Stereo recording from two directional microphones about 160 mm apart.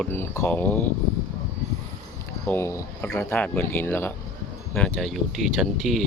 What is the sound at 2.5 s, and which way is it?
Speech, 15° left (ahead or behind).